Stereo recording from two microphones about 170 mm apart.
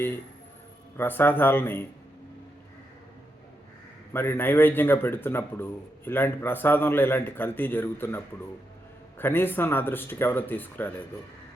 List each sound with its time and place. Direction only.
0.9 s a man's voice: 10° left (ahead or behind)
4.1 s a man's voice: 15° left (ahead or behind)